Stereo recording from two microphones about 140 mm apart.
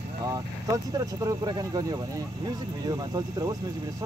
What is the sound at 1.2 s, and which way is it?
Speech, 30° right (ahead or behind).